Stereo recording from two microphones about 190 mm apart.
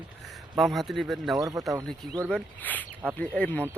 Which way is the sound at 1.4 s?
20° right (ahead or behind).